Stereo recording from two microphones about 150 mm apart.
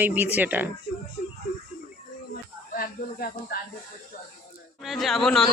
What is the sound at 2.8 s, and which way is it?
Speech, 75° left (ahead or behind).